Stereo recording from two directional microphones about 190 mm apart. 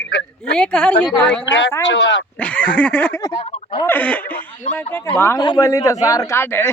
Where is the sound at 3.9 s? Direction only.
10° left (ahead or behind).